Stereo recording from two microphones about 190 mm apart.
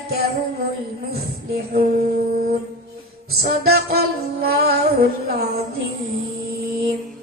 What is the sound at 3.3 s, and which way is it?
Music, 55° right (ahead or behind).